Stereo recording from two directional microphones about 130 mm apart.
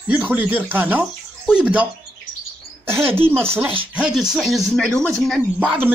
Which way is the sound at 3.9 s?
5° right (ahead or behind).